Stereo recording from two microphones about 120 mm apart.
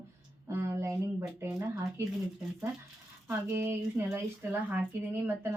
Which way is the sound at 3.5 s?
25° right (ahead or behind).